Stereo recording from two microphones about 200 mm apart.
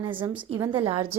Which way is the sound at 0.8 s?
25° right (ahead or behind).